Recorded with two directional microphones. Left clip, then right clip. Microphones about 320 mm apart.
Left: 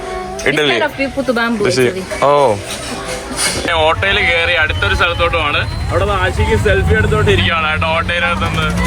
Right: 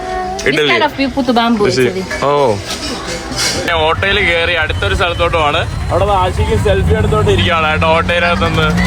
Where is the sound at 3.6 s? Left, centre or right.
Centre.